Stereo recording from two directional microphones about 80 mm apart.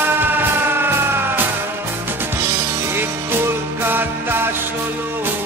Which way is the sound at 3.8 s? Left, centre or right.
Right.